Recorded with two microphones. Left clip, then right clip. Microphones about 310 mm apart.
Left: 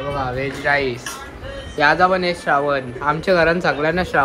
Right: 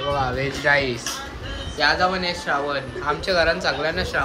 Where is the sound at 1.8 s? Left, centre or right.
Centre.